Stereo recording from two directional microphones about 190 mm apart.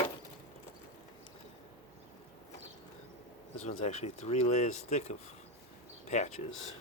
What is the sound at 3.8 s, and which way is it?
Speech, 35° left (ahead or behind).